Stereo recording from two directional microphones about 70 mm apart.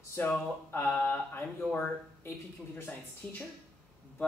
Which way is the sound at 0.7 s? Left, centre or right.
Left.